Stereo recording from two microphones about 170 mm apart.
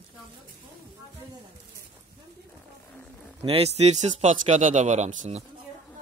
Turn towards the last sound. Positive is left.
turn(degrees=-40)  # may be behind; listen again after turning